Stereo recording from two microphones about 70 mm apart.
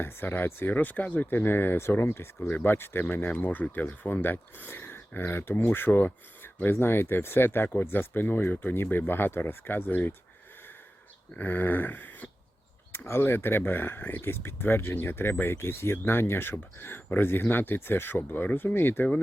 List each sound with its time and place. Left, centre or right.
0.0 s speech: left
11.3 s speech: left